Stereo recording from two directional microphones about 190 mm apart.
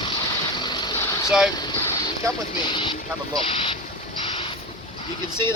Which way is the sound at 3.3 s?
30° left (ahead or behind).